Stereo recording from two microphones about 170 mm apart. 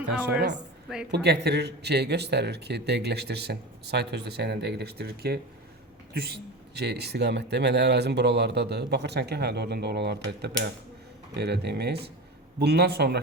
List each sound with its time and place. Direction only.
1.1 s a man's voice: 75° right (ahead or behind)